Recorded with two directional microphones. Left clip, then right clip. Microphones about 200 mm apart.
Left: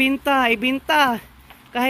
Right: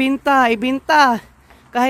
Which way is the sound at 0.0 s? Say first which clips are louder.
Right 3 dB; 20° right (ahead or behind).